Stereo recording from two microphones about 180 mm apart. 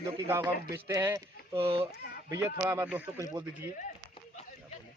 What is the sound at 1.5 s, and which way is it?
Speech, 30° right (ahead or behind).